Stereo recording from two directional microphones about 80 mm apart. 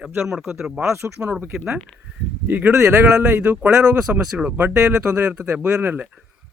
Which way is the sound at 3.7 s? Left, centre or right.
Right.